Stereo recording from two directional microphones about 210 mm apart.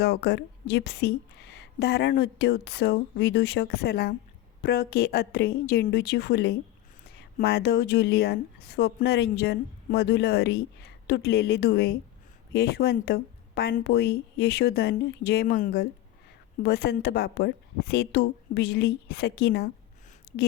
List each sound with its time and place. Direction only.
0.0 s speech: 50° left (ahead or behind)